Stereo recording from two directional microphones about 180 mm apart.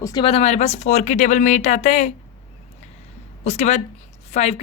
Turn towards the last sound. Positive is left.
turn(degrees=35)  # may be behind; listen again after turning